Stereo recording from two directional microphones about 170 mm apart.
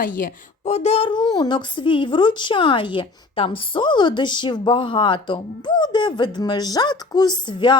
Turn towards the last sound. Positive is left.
turn(degrees=25)  # may be behind; listen again after turning